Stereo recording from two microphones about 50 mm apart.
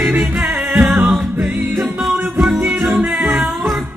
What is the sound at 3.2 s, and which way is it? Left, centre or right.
Music, right.